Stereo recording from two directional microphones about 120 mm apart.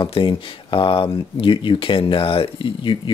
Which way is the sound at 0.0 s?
45° left (ahead or behind).